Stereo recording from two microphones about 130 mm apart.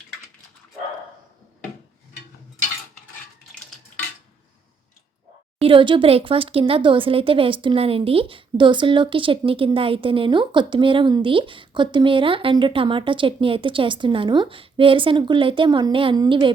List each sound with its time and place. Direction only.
5.5 s a woman's voice: 45° right (ahead or behind)